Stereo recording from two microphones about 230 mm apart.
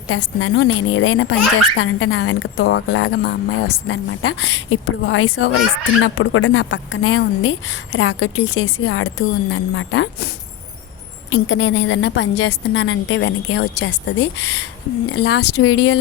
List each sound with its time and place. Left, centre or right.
0.1 s a woman's voice: left